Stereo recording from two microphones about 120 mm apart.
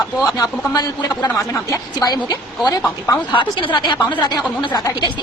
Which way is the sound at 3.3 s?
40° left (ahead or behind).